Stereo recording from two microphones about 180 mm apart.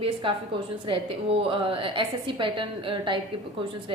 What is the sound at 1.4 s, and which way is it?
A woman's voice, 30° right (ahead or behind).